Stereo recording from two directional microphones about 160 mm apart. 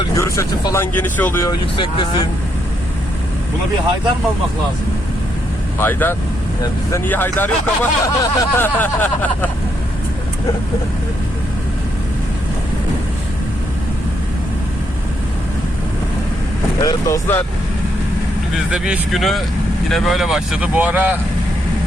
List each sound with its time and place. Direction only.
0.2 s speech: 20° left (ahead or behind)
1.7 s speech: 30° left (ahead or behind)
5.8 s speech: 15° left (ahead or behind)
8.0 s speech: 20° left (ahead or behind)
16.8 s speech: 15° left (ahead or behind)
18.7 s speech: centre (ahead or behind)